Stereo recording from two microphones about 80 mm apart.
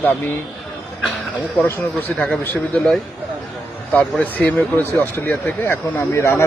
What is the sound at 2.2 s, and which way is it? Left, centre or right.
Speech, centre.